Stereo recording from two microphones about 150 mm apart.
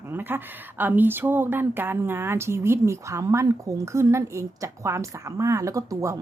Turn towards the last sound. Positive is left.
turn(degrees=-20)  # may be behind; listen again after turning